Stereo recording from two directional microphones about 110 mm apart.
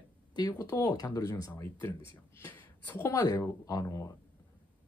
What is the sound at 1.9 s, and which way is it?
Speech, 50° right (ahead or behind).